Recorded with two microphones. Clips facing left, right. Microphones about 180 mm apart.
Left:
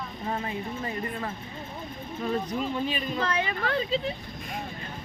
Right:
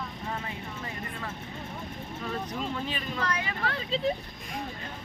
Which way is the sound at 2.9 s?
20° left (ahead or behind).